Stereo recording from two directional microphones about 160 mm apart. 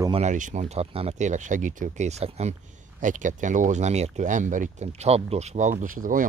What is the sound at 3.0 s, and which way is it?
Speech, 55° right (ahead or behind).